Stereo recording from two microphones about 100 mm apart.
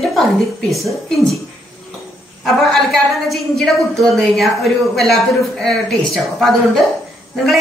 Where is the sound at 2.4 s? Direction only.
5° left (ahead or behind).